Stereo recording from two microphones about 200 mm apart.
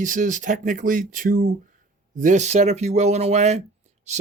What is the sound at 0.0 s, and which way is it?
Speech, 40° right (ahead or behind).